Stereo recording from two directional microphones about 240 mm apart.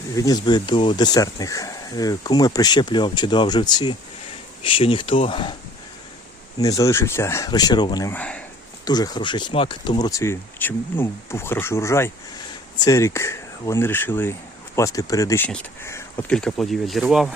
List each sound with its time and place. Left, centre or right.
0.2 s speech: centre
6.6 s speech: centre
8.8 s speech: centre